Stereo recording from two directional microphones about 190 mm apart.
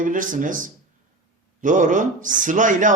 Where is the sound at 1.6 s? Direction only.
40° right (ahead or behind).